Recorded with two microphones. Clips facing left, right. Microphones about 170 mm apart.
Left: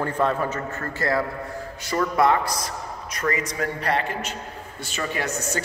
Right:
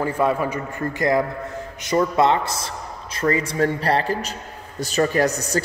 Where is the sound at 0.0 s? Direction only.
10° right (ahead or behind).